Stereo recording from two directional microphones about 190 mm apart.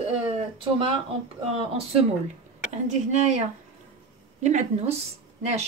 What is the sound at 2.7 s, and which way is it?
A woman's voice, 35° right (ahead or behind).